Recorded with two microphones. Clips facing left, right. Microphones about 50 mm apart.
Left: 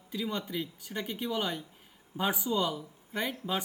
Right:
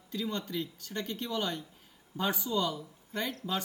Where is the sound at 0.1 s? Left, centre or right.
Centre.